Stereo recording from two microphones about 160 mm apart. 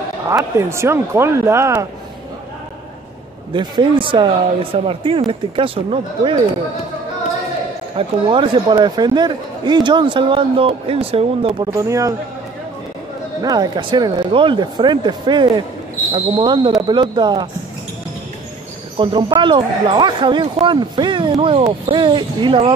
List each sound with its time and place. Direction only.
0.3 s speech: 15° right (ahead or behind)
3.5 s speech: 30° right (ahead or behind)
8.0 s speech: 35° right (ahead or behind)
11.6 s speech: 20° right (ahead or behind)
13.4 s speech: 25° right (ahead or behind)
18.9 s speech: 30° right (ahead or behind)